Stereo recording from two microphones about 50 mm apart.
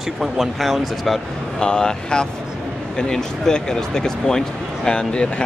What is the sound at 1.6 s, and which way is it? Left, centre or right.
Speech, centre.